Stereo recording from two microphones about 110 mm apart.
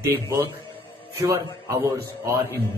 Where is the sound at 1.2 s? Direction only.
20° right (ahead or behind).